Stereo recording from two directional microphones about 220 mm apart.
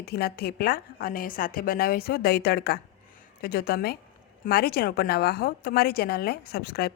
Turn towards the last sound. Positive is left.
turn(degrees=45)  # may be behind; listen again after turning